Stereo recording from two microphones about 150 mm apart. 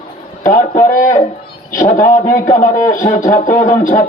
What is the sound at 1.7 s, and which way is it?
A man's voice, 60° left (ahead or behind).